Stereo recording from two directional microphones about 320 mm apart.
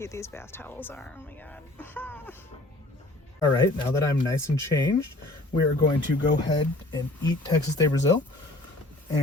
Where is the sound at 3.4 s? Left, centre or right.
Centre.